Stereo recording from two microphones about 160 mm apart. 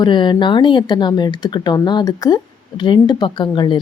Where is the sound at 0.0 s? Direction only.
30° left (ahead or behind).